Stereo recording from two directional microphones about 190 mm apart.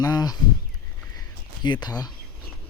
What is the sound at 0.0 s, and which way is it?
Speech, 20° left (ahead or behind).